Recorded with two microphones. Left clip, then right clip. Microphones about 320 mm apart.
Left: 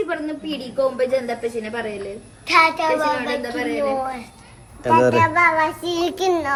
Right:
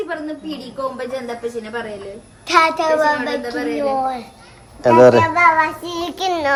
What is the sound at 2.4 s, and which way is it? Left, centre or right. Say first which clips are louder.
Speech: right 2 dB; right.